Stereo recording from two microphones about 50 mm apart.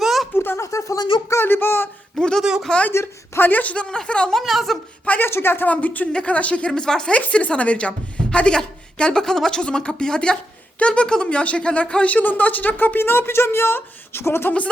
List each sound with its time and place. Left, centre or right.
0.0 s a sound: centre
0.3 s a sound: left
0.6 s speech: left
1.5 s speech: left
2.1 s speech: centre
2.4 s speech: centre
2.9 s a woman's voice: left
3.4 s speech: left
3.8 s speech: centre
4.4 s speech: centre
5.2 s speech: left
5.6 s a woman's voice: left
6.7 s speech: centre
7.1 s a woman's voice: left